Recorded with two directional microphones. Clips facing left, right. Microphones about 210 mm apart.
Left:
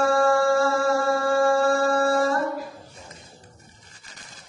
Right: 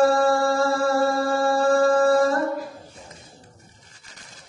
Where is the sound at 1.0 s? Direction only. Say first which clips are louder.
Even; 35° right (ahead or behind).